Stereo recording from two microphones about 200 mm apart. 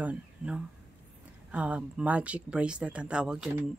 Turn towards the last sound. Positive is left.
turn(degrees=-5)  # may be behind; listen again after turning